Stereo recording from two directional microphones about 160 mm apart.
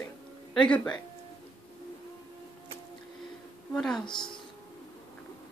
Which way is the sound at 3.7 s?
5° left (ahead or behind).